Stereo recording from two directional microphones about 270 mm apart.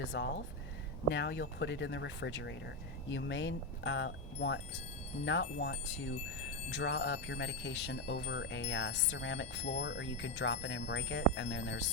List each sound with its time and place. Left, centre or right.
0.0 s speech: left